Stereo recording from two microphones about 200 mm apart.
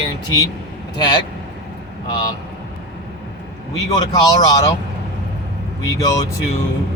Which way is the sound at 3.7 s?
20° left (ahead or behind).